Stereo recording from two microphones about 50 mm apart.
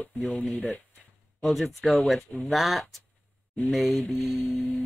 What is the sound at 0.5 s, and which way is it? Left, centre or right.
Speech, left.